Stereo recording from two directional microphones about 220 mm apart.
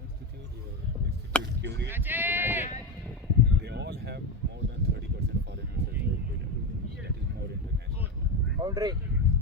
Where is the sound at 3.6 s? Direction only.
50° right (ahead or behind).